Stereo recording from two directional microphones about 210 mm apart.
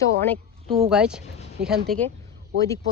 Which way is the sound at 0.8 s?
5° right (ahead or behind).